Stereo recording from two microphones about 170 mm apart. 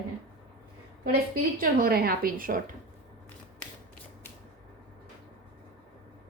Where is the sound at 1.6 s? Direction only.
60° right (ahead or behind).